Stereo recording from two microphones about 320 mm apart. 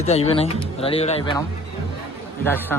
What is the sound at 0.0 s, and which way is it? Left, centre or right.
Speech, centre.